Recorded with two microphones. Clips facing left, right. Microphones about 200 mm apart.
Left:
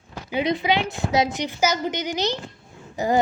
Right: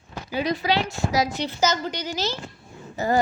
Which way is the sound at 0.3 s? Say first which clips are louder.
Left 2 dB; 20° left (ahead or behind).